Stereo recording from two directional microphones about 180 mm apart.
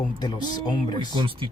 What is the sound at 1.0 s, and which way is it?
Speech, 25° right (ahead or behind).